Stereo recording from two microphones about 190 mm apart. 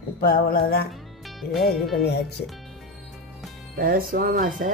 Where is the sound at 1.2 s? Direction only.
Centre (ahead or behind).